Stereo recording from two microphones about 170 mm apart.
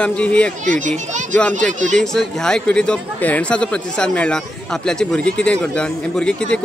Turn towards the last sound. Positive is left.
turn(degrees=5)  # may be behind; listen again after turning